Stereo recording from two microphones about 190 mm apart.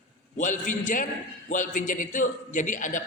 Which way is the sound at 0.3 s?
40° left (ahead or behind).